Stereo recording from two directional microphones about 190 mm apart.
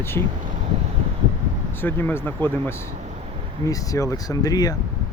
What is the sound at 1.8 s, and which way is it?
Speech, 10° left (ahead or behind).